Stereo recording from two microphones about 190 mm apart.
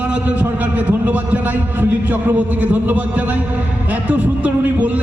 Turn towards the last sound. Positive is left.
turn(degrees=-5)  # may be behind; listen again after turning